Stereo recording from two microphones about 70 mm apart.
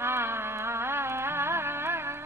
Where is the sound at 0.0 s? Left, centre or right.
Right.